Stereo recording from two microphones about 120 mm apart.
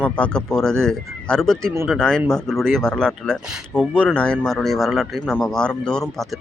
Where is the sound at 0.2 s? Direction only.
5° left (ahead or behind).